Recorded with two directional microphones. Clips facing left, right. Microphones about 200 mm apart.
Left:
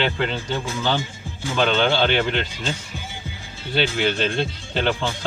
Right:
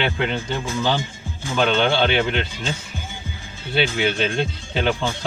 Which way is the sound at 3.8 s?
5° right (ahead or behind).